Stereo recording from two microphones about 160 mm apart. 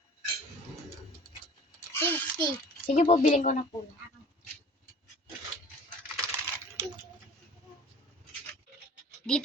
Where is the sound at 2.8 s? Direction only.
45° left (ahead or behind).